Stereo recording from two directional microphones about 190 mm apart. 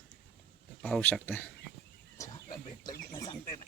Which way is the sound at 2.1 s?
20° left (ahead or behind).